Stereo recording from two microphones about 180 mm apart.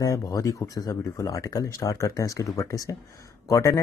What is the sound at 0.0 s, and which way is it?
Speech, 20° left (ahead or behind).